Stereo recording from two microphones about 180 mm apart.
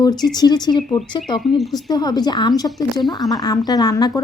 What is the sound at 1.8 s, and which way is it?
A woman's voice, 20° left (ahead or behind).